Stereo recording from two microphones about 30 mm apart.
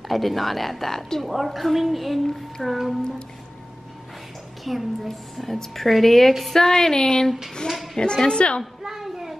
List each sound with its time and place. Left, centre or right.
0.1 s a woman's voice: centre
1.2 s a woman's voice: centre
4.7 s a woman's voice: centre; by 7.2 s left
7.6 s a woman's voice: centre
8.0 s a woman's voice: left
8.8 s a sound: centre